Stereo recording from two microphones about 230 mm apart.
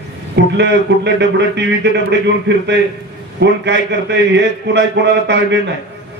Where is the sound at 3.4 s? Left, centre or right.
Right.